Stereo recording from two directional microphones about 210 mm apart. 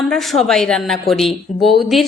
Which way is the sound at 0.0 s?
Centre (ahead or behind).